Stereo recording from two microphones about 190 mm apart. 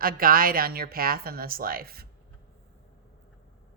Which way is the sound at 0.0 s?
50° right (ahead or behind).